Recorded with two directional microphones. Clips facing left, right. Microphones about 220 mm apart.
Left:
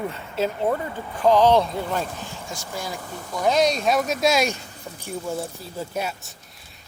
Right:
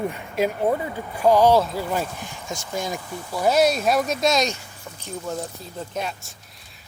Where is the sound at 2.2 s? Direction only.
20° right (ahead or behind).